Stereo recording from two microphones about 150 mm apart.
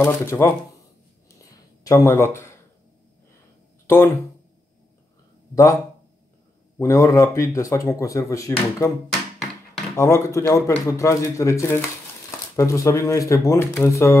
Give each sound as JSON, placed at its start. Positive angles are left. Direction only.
{"t": 0.0, "sound": "speech", "side_deg": 15}
{"t": 1.9, "sound": "speech", "side_deg": 15}
{"t": 5.5, "sound": "speech", "side_deg": 20}
{"t": 6.8, "sound": "speech", "side_deg": 20}
{"t": 9.9, "sound": "speech", "side_deg": 20}